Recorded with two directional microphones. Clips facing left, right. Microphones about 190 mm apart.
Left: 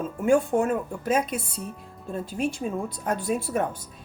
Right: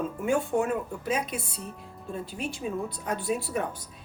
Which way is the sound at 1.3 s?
Centre (ahead or behind).